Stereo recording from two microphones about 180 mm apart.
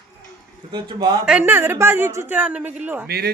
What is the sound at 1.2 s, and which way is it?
Speech, 10° right (ahead or behind).